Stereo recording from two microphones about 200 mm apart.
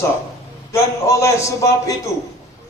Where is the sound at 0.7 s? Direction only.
15° left (ahead or behind).